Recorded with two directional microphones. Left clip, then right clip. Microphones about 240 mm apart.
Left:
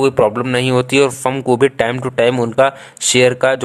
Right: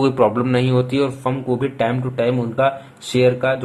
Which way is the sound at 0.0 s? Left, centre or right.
Left.